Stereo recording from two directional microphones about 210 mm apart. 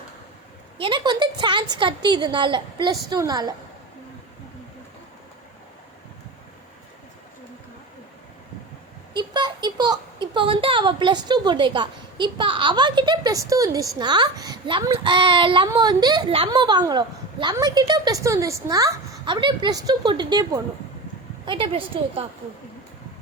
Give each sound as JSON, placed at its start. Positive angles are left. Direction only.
{"t": 0.8, "sound": "speech", "side_deg": -20}
{"t": 9.1, "sound": "speech", "side_deg": -20}